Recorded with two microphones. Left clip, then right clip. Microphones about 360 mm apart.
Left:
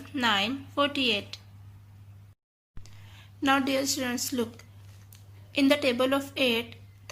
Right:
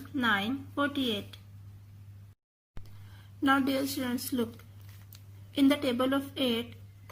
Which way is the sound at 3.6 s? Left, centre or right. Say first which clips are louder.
Left 4 dB; left.